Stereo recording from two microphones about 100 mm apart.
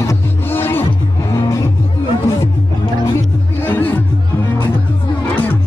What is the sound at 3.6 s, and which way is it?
Music, 20° left (ahead or behind).